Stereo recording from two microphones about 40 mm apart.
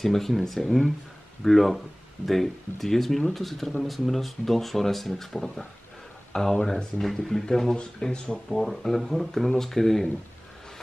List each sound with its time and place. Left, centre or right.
0.0 s speech: centre
7.7 s speech: left
8.5 s speech: centre